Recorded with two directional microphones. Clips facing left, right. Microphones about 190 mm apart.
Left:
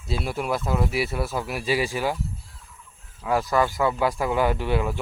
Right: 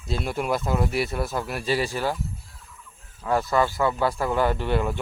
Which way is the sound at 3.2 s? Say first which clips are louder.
Even; 10° left (ahead or behind).